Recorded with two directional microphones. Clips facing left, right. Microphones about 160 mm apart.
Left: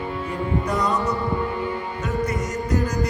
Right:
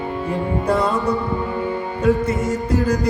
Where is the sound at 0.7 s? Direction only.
30° right (ahead or behind).